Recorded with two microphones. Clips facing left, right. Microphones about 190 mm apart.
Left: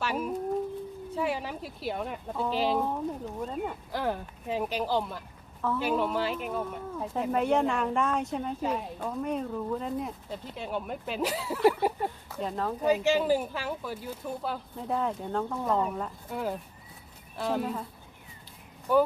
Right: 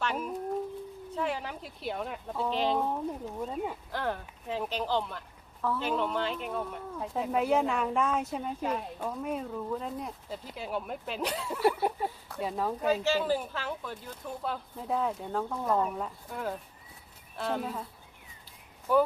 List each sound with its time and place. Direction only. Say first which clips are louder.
0.0 s speech: left 2 dB; 5° left (ahead or behind)
3.9 s speech: left 5 dB; 10° left (ahead or behind); by 12.7 s 5° right (ahead or behind)
12.8 s speech: left 4 dB; 15° left (ahead or behind)
18.9 s speech: left 1 dB; centre (ahead or behind)